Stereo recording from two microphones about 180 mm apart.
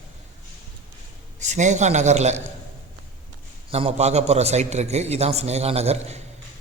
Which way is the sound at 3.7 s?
35° right (ahead or behind).